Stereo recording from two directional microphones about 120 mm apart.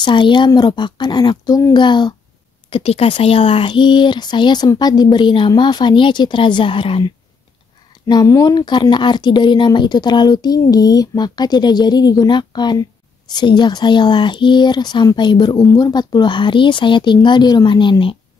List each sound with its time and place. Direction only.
0.0 s speech: 40° left (ahead or behind)
2.7 s speech: 55° left (ahead or behind)
8.1 s speech: 30° left (ahead or behind)